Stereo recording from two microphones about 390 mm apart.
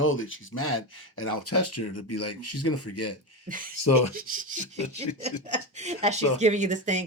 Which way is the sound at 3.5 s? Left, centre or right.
Right.